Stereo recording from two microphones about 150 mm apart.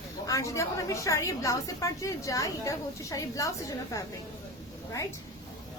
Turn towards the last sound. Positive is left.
turn(degrees=20)  # may be behind; listen again after turning